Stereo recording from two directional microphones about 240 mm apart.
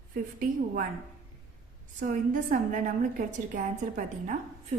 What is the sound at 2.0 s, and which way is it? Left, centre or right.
A woman's voice, right.